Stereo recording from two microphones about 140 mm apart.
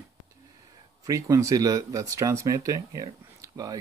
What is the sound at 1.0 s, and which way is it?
Speech, 25° right (ahead or behind).